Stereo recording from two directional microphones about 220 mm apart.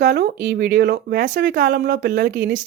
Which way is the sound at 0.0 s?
45° right (ahead or behind).